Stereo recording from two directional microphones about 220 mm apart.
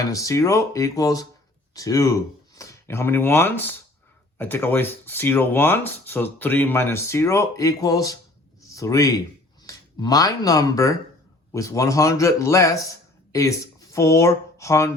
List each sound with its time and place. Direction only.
0.0 s speech: 15° left (ahead or behind)